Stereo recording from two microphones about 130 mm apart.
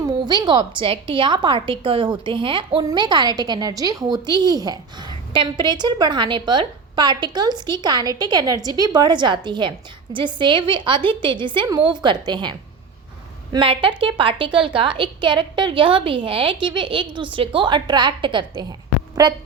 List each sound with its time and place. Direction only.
0.0 s a woman's voice: 35° right (ahead or behind)